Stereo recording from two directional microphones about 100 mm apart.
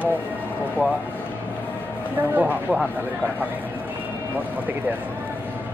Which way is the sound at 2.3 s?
15° right (ahead or behind).